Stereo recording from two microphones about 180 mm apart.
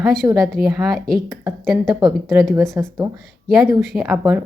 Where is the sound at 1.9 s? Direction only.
20° right (ahead or behind).